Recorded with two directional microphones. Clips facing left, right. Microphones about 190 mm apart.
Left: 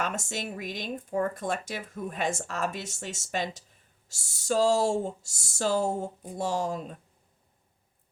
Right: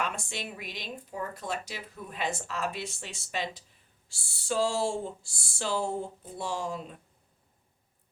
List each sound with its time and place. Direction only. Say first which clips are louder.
0.0 s speech: left 2 dB; 45° left (ahead or behind)